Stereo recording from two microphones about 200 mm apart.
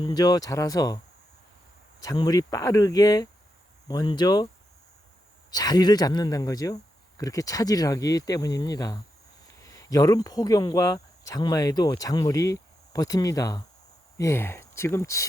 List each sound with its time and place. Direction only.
0.0 s speech: 20° left (ahead or behind)
2.0 s speech: 20° left (ahead or behind)
5.5 s speech: 20° left (ahead or behind)